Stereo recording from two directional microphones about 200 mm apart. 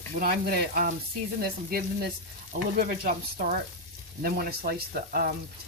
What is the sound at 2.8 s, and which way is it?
Speech, 45° right (ahead or behind).